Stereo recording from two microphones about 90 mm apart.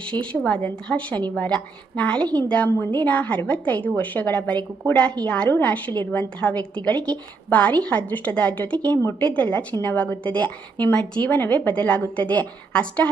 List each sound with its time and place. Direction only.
0.0 s a woman's voice: 15° left (ahead or behind)